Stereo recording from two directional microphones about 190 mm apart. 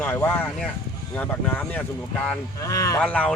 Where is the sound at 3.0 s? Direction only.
5° left (ahead or behind).